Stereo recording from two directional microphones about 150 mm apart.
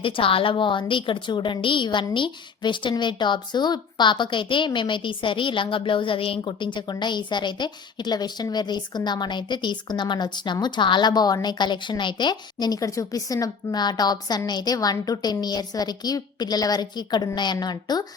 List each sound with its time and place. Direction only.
0.0 s a woman's voice: 35° left (ahead or behind)